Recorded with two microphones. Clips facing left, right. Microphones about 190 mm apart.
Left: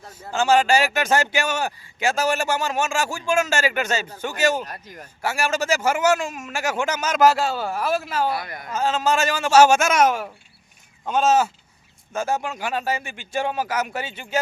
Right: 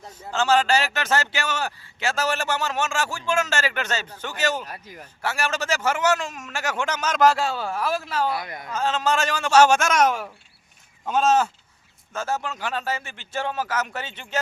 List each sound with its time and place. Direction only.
0.1 s speech: 10° left (ahead or behind)
4.6 s speech: 5° right (ahead or behind)
5.2 s speech: 10° left (ahead or behind)
8.4 s speech: 20° right (ahead or behind)
8.7 s speech: 10° left (ahead or behind)